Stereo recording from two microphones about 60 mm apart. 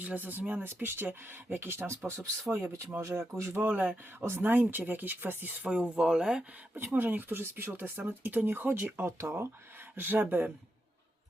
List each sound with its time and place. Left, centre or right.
0.0 s speech: right
3.0 s speech: right
3.6 s speech: right
4.2 s speech: right
5.6 s speech: centre
6.7 s speech: right